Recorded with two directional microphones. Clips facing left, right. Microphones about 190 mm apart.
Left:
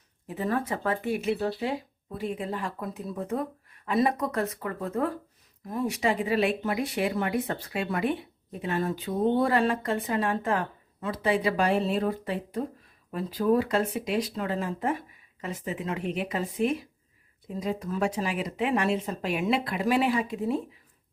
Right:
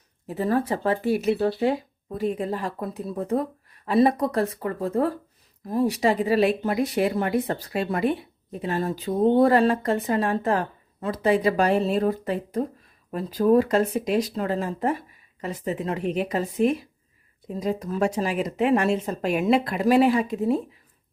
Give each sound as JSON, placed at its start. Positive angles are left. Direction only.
{"t": 0.3, "sound": "speech", "side_deg": -35}